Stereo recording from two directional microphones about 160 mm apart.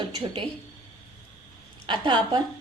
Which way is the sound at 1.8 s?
30° right (ahead or behind).